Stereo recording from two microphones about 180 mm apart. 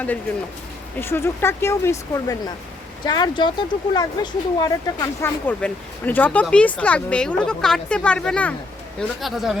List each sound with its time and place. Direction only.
0.9 s speech: 10° left (ahead or behind)
5.5 s speech: 5° left (ahead or behind)